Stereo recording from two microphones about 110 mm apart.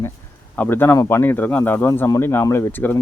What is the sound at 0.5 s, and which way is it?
Speech, 15° left (ahead or behind).